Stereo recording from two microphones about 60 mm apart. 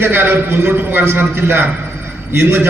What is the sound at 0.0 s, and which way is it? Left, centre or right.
A man's voice, right.